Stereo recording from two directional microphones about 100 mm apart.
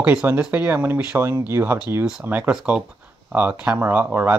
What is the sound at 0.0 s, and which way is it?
Speech, 15° right (ahead or behind).